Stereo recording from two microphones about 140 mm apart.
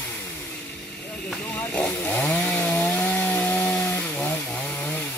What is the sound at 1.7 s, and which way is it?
Chainsaw, 10° left (ahead or behind).